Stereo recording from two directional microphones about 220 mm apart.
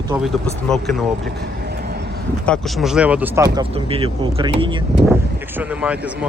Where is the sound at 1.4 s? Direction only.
45° right (ahead or behind).